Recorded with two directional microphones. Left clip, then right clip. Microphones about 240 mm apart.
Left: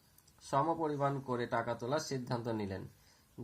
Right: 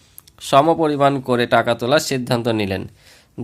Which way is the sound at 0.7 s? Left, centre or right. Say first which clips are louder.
Right 19 dB; right.